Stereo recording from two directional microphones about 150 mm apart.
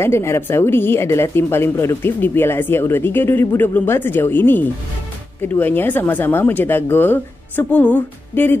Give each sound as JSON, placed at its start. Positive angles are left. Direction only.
{"t": 0.0, "sound": "a woman's voice", "side_deg": 15}